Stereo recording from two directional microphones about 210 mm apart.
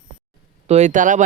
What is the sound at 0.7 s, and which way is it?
Speech, 35° right (ahead or behind).